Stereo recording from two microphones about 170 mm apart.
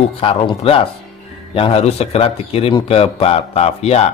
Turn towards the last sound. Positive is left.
turn(degrees=40)  # may be behind; listen again after turning